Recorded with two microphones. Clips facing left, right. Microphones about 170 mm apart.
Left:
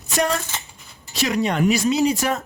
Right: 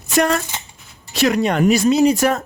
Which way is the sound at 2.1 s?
65° right (ahead or behind).